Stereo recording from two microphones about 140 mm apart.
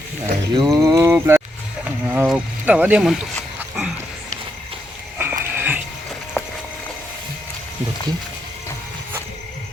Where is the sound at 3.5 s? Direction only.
5° right (ahead or behind).